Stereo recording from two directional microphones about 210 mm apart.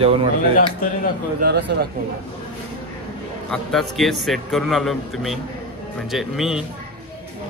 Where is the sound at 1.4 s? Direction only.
50° right (ahead or behind).